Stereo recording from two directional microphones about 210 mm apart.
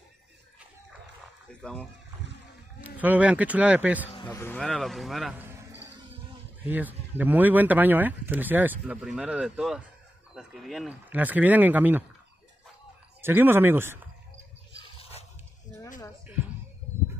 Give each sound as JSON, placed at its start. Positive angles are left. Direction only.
{"t": 1.5, "sound": "speech", "side_deg": 5}
{"t": 2.8, "sound": "speech", "side_deg": -5}
{"t": 4.1, "sound": "speech", "side_deg": 20}
{"t": 6.6, "sound": "speech", "side_deg": -10}
{"t": 13.2, "sound": "speech", "side_deg": -10}
{"t": 14.8, "sound": "a sound", "side_deg": 30}